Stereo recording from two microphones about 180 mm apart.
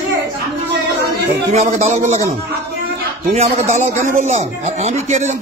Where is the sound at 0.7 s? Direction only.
65° right (ahead or behind).